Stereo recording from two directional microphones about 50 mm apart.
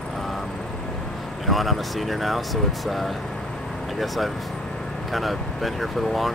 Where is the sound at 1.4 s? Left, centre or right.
Centre.